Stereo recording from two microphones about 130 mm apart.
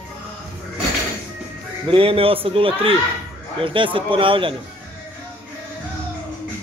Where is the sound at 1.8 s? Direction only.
45° right (ahead or behind).